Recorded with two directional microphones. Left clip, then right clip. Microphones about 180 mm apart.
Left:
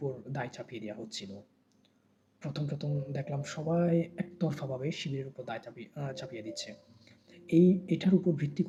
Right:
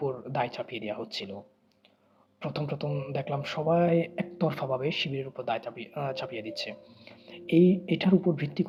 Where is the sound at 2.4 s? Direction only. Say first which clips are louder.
Right 7 dB; 15° left (ahead or behind).